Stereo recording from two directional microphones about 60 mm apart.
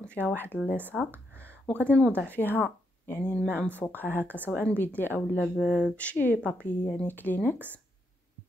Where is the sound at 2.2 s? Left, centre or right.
Left.